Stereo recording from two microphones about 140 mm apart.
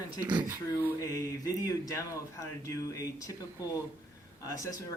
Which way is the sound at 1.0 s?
25° left (ahead or behind).